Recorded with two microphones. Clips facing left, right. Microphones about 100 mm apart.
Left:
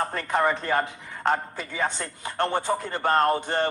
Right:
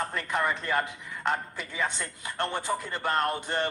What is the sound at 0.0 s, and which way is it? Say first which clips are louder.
A man's voice: left 5 dB; 40° left (ahead or behind).